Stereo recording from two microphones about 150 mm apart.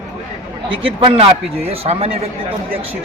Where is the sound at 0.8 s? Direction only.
40° right (ahead or behind).